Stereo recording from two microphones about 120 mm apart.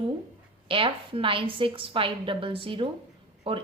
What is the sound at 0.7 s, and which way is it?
A woman's voice, 45° right (ahead or behind).